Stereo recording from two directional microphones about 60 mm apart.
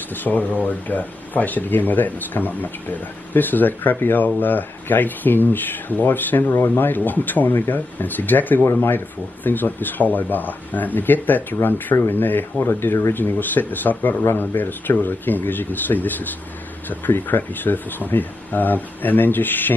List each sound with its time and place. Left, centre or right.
0.1 s speech: left